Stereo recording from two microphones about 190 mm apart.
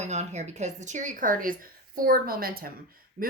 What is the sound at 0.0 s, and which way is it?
Speech, 35° right (ahead or behind).